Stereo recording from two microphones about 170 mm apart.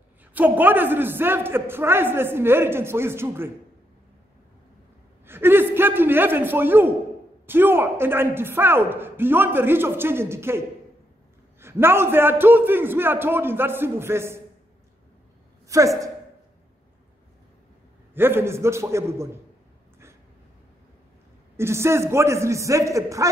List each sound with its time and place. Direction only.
0.3 s a man's voice: 10° right (ahead or behind)
5.2 s a man's voice: 15° right (ahead or behind)
11.6 s a man's voice: 15° right (ahead or behind)
15.7 s speech: 20° right (ahead or behind)
18.1 s a man's voice: 15° right (ahead or behind)
21.5 s a man's voice: 15° right (ahead or behind)